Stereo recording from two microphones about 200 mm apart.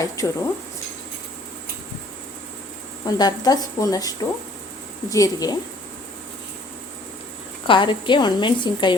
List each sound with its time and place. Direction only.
0.0 s a woman's voice: 15° left (ahead or behind)
3.2 s a woman's voice: 20° left (ahead or behind)
7.7 s a woman's voice: 25° left (ahead or behind)